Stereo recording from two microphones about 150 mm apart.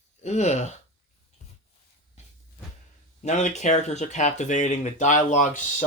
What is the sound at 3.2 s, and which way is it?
Speech, 50° left (ahead or behind).